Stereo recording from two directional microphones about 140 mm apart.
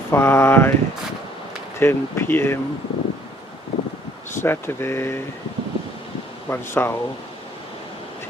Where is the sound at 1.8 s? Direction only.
15° left (ahead or behind).